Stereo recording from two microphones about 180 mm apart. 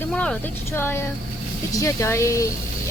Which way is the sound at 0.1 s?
5° left (ahead or behind).